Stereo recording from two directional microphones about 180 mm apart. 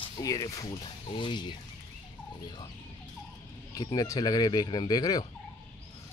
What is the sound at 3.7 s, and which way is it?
Speech, 20° left (ahead or behind).